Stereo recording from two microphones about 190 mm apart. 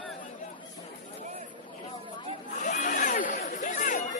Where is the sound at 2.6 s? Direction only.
40° left (ahead or behind).